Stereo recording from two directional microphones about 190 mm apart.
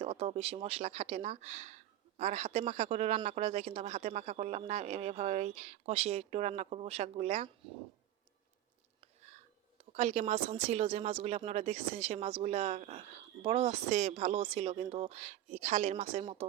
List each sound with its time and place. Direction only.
0.0 s speech: 30° right (ahead or behind)
9.0 s speech: 35° right (ahead or behind)